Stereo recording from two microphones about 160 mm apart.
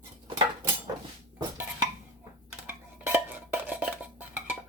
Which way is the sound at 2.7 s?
15° right (ahead or behind).